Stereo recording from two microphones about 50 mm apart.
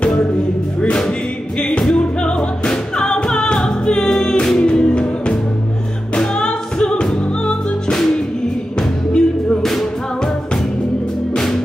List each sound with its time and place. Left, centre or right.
0.0 s music: centre
1.6 s music: centre
7.9 s music: centre